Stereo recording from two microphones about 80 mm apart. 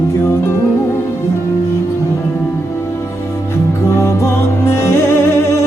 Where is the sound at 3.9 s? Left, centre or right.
Left.